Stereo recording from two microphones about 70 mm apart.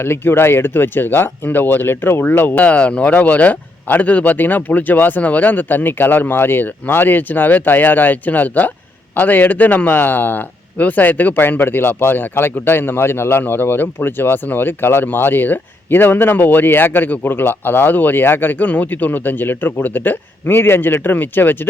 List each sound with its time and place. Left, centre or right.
0.0 s a man's voice: left